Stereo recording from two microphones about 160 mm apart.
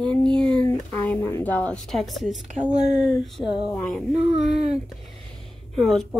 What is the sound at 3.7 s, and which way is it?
Speech, 5° left (ahead or behind).